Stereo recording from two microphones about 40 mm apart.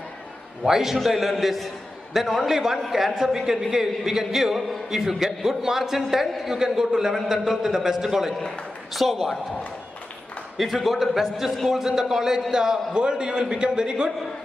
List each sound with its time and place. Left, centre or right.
0.7 s a man's voice: centre
8.4 s a man's voice: centre
10.6 s a man's voice: centre
11.8 s a man's voice: centre